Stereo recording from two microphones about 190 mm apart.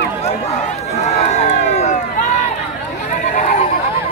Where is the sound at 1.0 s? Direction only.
35° left (ahead or behind).